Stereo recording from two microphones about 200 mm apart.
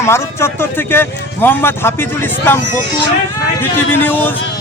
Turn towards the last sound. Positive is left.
turn(degrees=10)  # may be behind; listen again after turning